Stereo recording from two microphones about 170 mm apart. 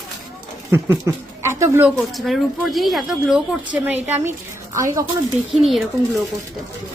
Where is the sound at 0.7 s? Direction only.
15° right (ahead or behind).